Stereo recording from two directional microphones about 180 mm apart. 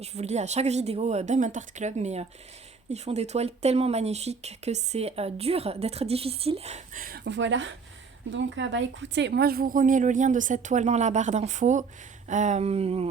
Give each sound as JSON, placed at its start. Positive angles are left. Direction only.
{"t": 0.0, "sound": "speech", "side_deg": -35}
{"t": 7.0, "sound": "speech", "side_deg": -65}